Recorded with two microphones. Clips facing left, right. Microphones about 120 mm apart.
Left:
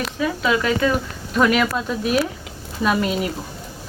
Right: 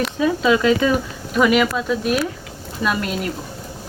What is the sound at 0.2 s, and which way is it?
Speech, 20° right (ahead or behind).